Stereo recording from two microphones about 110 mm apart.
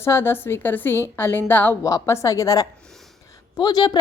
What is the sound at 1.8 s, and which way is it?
A woman's voice, 30° left (ahead or behind).